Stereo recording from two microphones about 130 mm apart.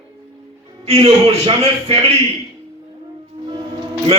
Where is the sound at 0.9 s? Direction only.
50° right (ahead or behind).